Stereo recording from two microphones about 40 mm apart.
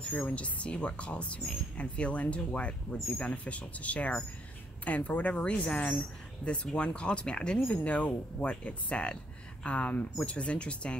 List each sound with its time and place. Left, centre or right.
0.3 s speech: left
6.4 s speech: left
7.7 s speech: left